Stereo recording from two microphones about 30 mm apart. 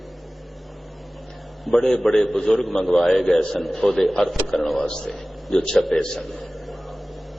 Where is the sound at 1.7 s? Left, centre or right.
Centre.